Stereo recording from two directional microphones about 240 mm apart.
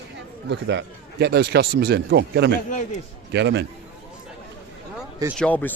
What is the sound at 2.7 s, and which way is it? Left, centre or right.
Speech, left.